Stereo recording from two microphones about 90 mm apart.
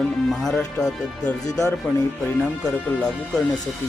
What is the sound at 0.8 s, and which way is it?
Speech, 10° left (ahead or behind).